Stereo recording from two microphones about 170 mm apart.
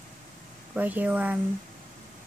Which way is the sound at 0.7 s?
10° right (ahead or behind).